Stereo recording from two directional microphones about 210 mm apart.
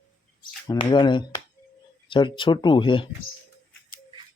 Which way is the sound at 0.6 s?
20° left (ahead or behind).